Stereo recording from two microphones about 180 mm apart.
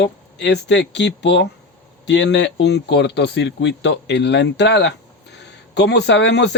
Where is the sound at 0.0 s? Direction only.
75° left (ahead or behind).